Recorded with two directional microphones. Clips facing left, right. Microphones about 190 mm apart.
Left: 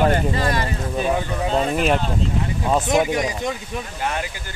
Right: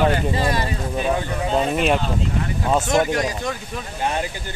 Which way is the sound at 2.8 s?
15° left (ahead or behind).